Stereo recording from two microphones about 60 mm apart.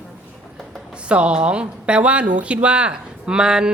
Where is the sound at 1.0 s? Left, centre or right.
Centre.